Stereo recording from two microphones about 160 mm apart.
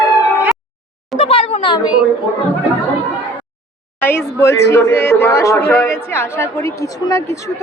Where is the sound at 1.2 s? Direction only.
35° left (ahead or behind).